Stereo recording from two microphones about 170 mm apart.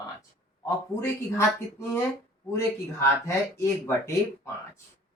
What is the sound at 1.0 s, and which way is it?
Speech, 15° left (ahead or behind).